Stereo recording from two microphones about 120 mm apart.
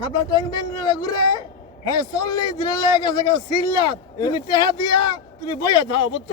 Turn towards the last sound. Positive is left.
turn(degrees=40)  # may be behind; listen again after turning